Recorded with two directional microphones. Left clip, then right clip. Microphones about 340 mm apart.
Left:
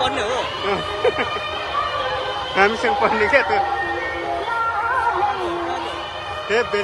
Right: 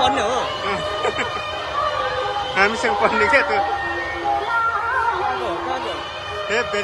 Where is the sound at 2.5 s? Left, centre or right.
Centre.